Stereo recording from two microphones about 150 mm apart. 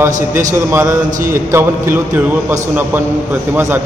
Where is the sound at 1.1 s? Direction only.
60° right (ahead or behind).